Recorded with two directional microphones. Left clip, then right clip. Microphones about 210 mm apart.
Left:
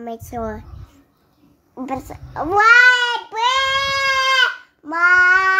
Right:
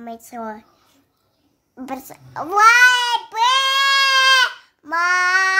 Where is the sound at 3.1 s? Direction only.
35° right (ahead or behind).